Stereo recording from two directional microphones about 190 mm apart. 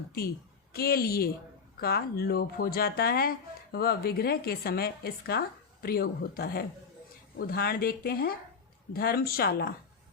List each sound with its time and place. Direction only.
0.1 s speech: 55° left (ahead or behind)